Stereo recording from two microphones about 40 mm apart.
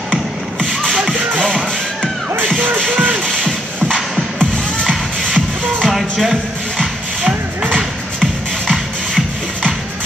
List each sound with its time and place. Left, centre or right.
0.6 s music: centre
2.9 s music: right
3.4 s music: centre
5.2 s music: centre
5.9 s music: centre